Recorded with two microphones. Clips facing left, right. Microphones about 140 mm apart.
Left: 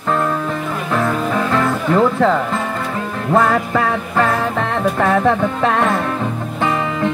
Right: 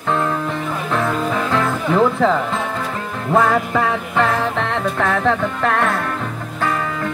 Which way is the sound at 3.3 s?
Centre (ahead or behind).